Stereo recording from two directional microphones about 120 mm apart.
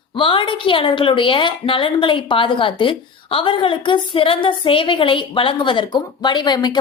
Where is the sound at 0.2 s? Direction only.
45° left (ahead or behind).